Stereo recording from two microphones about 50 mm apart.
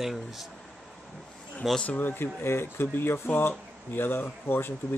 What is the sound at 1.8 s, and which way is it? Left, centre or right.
Speech, left.